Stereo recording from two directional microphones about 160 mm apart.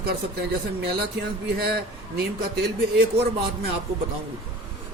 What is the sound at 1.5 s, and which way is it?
A man's voice, 85° right.